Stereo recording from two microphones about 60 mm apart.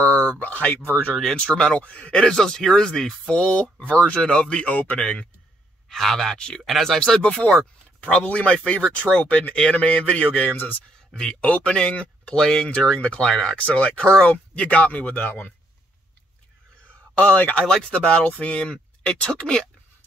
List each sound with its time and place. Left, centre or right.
0.0 s a sound: left
0.9 s speech: centre
5.9 s speech: centre
8.0 s speech: left
11.1 s speech: centre
13.9 s speech: centre; by 15.5 s left
17.1 s speech: left